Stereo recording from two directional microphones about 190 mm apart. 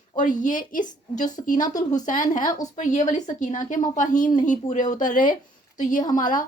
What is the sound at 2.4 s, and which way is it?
Speech, 20° left (ahead or behind).